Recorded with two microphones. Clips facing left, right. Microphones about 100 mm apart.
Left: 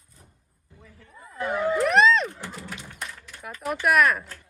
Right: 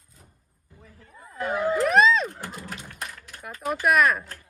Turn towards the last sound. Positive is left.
turn(degrees=0)  # may be behind; listen again after turning